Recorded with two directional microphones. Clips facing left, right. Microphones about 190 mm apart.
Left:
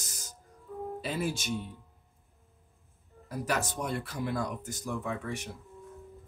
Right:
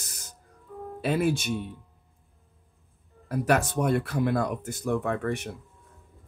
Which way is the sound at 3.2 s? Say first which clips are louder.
Right 8 dB; 60° right (ahead or behind).